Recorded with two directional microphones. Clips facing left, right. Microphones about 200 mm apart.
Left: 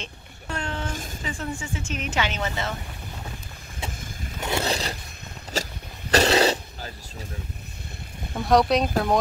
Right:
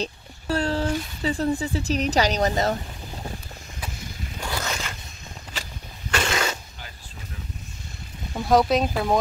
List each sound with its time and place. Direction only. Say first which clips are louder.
0.0 s a sound: right 9 dB; 35° right (ahead or behind)
1.2 s speech: right 9 dB; 35° right (ahead or behind)
4.4 s scrape: left 5 dB; 25° left (ahead or behind)
5.5 s vehicle: left 9 dB; 40° left (ahead or behind)
8.4 s speech: even; centre (ahead or behind)